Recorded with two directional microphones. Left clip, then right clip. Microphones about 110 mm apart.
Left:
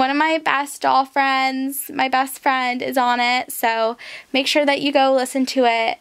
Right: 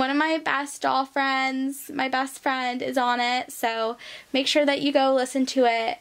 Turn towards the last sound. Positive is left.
turn(degrees=30)  # may be behind; listen again after turning